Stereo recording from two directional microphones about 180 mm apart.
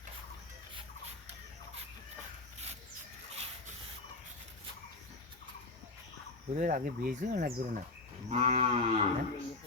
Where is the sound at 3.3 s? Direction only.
35° right (ahead or behind).